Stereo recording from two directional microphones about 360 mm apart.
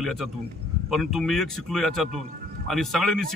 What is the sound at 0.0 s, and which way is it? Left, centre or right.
A man's voice, centre.